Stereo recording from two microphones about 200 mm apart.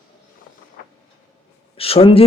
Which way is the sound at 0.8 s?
50° left (ahead or behind).